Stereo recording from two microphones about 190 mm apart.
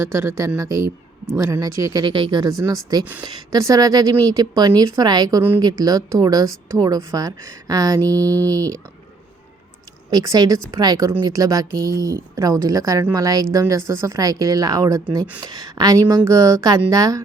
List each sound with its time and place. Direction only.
0.0 s a woman's voice: 15° right (ahead or behind)
10.1 s a woman's voice: 20° right (ahead or behind)